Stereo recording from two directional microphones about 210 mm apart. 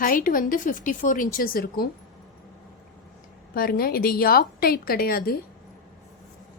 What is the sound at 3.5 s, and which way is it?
Speech, 45° left (ahead or behind).